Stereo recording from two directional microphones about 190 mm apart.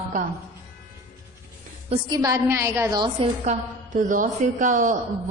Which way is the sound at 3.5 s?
45° right (ahead or behind).